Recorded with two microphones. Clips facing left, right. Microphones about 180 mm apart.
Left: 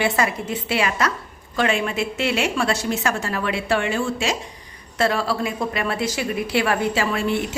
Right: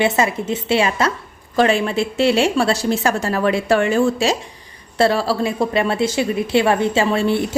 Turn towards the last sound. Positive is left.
turn(degrees=-30)  # may be behind; listen again after turning